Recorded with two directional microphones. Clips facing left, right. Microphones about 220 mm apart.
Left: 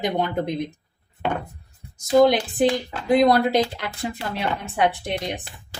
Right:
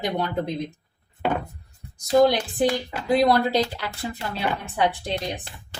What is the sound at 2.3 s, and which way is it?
A woman's voice, 20° left (ahead or behind).